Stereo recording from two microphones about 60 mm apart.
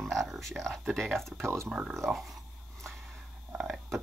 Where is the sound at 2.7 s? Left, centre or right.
Centre.